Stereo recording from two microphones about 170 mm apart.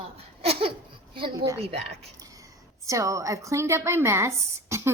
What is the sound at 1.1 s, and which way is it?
Speech, 30° right (ahead or behind).